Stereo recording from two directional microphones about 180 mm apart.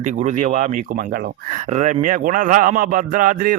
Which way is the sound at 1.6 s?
40° right (ahead or behind).